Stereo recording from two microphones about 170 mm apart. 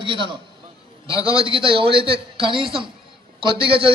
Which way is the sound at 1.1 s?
20° left (ahead or behind).